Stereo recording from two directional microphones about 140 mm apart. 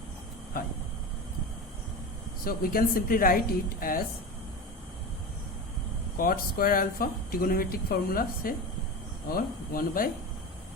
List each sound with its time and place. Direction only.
2.4 s speech: 90° left
6.1 s speech: 90° left